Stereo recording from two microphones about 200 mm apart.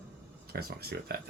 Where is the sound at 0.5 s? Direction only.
50° right (ahead or behind).